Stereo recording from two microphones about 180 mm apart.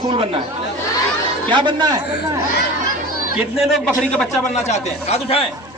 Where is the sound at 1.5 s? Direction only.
25° right (ahead or behind).